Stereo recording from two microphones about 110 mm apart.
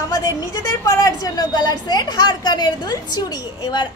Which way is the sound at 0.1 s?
30° left (ahead or behind).